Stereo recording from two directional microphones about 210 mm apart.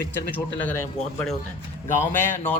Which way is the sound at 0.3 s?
10° left (ahead or behind).